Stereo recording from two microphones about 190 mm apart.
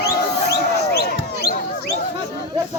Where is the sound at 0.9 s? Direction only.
55° left (ahead or behind).